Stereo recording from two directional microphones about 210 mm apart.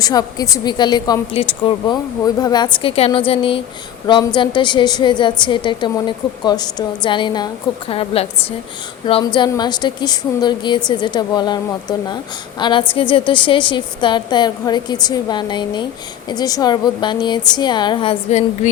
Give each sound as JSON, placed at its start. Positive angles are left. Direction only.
{"t": 0.0, "sound": "a woman's voice", "side_deg": 20}